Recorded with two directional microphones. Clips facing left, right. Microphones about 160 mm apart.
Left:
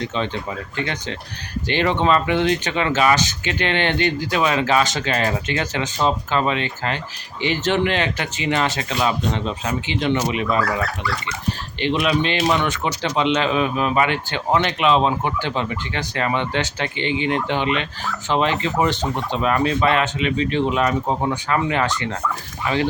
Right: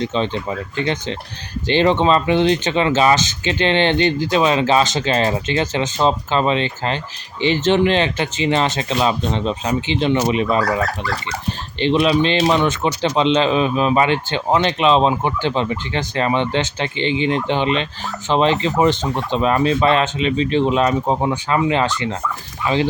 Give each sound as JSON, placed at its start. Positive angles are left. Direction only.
{"t": 0.0, "sound": "speech", "side_deg": -25}
{"t": 11.8, "sound": "speech", "side_deg": -30}